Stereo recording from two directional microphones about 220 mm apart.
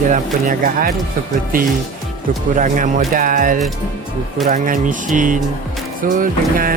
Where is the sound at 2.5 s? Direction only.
35° right (ahead or behind).